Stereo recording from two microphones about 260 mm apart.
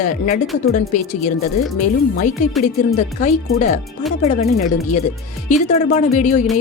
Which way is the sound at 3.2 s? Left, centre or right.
Left.